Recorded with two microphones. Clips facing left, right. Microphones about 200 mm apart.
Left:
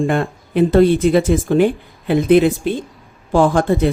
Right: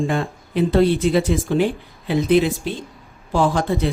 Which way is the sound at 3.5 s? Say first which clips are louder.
Left 5 dB; 50° left (ahead or behind).